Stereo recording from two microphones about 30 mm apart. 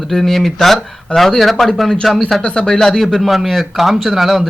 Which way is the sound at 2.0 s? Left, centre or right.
Centre.